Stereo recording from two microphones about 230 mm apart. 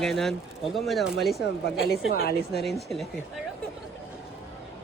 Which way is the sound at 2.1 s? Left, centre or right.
Left.